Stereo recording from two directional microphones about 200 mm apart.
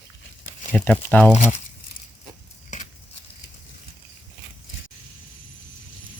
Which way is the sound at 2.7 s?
35° left (ahead or behind).